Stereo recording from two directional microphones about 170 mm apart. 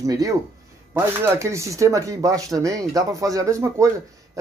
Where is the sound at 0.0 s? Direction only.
20° right (ahead or behind).